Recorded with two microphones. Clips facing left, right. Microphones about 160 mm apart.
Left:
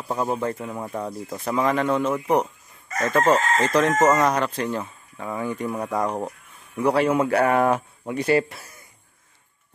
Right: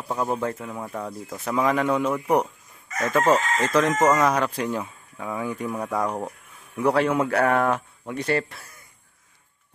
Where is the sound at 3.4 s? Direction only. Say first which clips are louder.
Left 3 dB; 40° left (ahead or behind).